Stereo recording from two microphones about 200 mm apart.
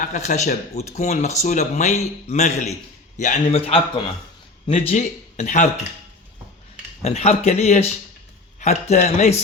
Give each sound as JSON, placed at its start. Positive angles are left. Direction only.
{"t": 0.0, "sound": "speech", "side_deg": 40}
{"t": 7.0, "sound": "speech", "side_deg": 30}